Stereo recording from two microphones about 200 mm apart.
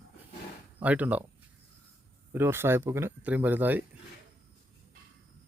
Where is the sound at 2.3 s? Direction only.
10° right (ahead or behind).